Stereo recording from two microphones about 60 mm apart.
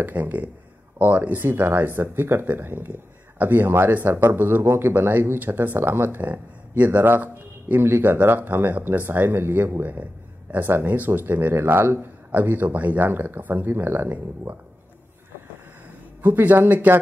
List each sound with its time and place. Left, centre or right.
0.0 s speech: right
16.2 s speech: right